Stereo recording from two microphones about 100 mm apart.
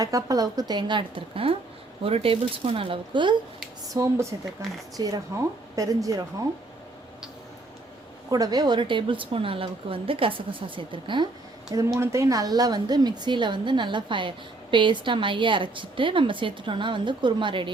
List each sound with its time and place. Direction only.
0.0 s a woman's voice: 35° right (ahead or behind); by 3.3 s 55° right (ahead or behind)
3.9 s a woman's voice: 30° right (ahead or behind)
8.3 s a woman's voice: 40° right (ahead or behind)
11.9 s a woman's voice: 30° right (ahead or behind); by 17.7 s 55° right (ahead or behind)